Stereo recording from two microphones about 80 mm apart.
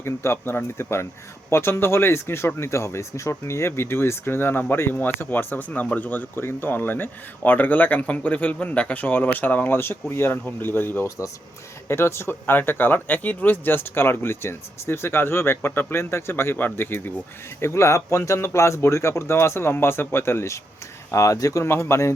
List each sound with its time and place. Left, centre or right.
0.0 s speech: left